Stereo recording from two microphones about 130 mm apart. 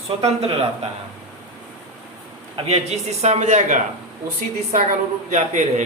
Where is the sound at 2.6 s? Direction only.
55° right (ahead or behind).